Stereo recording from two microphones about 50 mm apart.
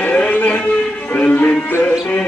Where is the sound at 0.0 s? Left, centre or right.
Left.